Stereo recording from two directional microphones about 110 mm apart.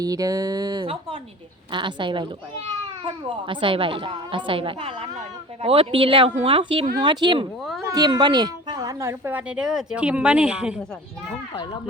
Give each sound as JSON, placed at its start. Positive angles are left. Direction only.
{"t": 0.0, "sound": "speech", "side_deg": -35}
{"t": 1.7, "sound": "a woman's voice", "side_deg": -45}
{"t": 9.0, "sound": "a woman's voice", "side_deg": -20}